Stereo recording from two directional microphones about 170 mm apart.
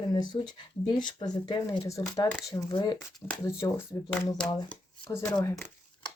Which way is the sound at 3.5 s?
20° left (ahead or behind).